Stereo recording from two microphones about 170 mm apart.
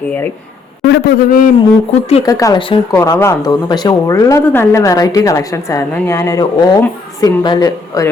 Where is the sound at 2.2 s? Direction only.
20° left (ahead or behind).